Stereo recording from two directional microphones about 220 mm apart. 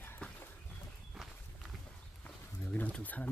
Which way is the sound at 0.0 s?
10° left (ahead or behind).